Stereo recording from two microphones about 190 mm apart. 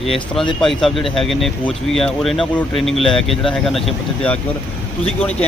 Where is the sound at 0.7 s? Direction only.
Centre (ahead or behind).